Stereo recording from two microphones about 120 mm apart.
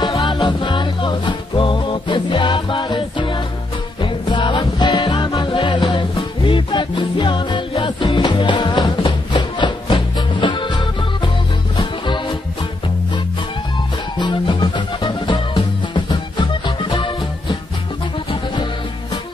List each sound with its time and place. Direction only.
0.0 s music: 35° left (ahead or behind)
14.1 s music: 35° left (ahead or behind)